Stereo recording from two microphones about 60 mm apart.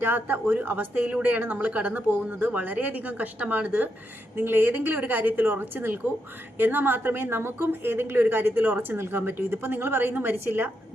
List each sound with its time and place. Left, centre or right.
0.0 s a woman's voice: right
4.4 s a woman's voice: right